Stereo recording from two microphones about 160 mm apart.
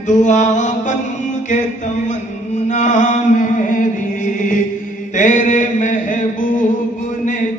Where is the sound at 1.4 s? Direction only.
50° left (ahead or behind).